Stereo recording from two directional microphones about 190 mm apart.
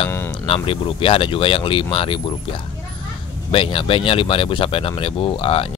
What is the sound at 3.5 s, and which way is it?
Speech, 25° left (ahead or behind).